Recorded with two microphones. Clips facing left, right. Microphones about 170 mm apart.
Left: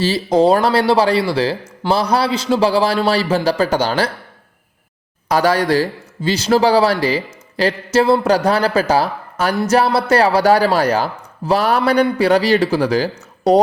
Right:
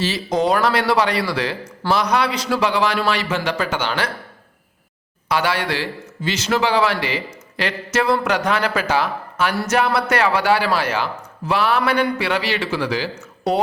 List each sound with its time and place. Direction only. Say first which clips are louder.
0.0 s speech: left 6 dB; 35° left (ahead or behind)
5.3 s speech: left 6 dB; 40° left (ahead or behind)